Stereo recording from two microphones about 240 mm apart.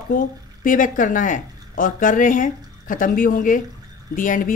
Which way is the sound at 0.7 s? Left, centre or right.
Left.